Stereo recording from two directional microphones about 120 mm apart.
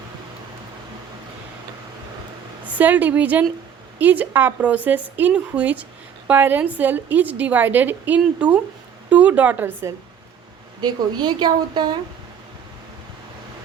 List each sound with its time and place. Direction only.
2.7 s a woman's voice: 15° right (ahead or behind)
10.8 s speech: 35° right (ahead or behind)